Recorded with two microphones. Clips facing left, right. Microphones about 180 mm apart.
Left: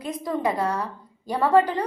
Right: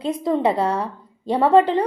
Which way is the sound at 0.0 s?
25° right (ahead or behind).